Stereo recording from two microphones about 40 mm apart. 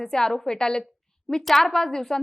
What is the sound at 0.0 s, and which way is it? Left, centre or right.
Speech, centre.